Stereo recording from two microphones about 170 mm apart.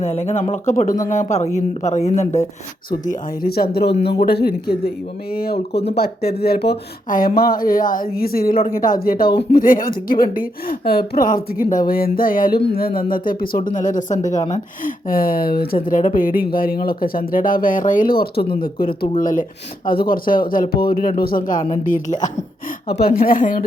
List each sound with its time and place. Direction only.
0.0 s speech: 40° left (ahead or behind)
3.1 s speech: 60° left (ahead or behind)
23.0 s speech: 60° left (ahead or behind)